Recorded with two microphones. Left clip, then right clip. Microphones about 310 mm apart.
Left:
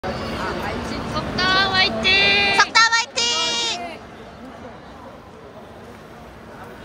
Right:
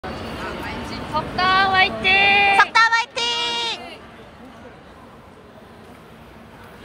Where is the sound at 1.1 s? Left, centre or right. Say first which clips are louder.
Right 2 dB; centre.